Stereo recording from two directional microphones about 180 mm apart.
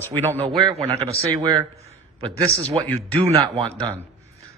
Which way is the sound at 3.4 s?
25° right (ahead or behind).